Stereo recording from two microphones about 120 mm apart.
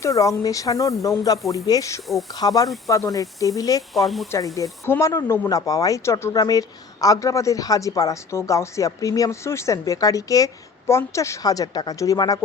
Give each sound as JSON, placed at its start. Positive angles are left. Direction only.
{"t": 0.0, "sound": "speech", "side_deg": 25}
{"t": 3.9, "sound": "speech", "side_deg": 0}
{"t": 4.5, "sound": "speech", "side_deg": 25}